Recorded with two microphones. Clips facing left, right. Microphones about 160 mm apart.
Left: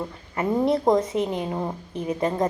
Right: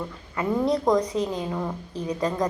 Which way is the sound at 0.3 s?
25° left (ahead or behind).